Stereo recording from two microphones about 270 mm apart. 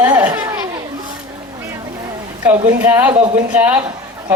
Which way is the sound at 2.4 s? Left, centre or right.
Centre.